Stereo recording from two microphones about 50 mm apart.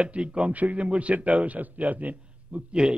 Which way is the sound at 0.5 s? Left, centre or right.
Right.